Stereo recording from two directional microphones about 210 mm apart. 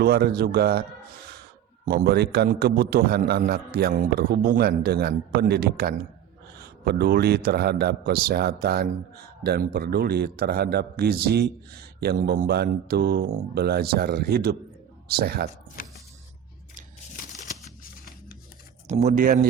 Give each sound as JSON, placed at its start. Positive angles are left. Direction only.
{"t": 0.0, "sound": "a man's voice", "side_deg": -45}
{"t": 15.8, "sound": "a sound", "side_deg": 45}
{"t": 18.9, "sound": "speech", "side_deg": -35}